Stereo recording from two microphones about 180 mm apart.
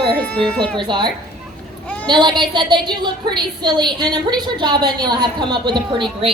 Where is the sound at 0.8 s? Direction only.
25° right (ahead or behind).